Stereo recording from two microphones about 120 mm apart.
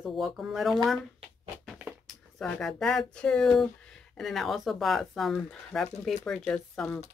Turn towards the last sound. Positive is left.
turn(degrees=10)  # may be behind; listen again after turning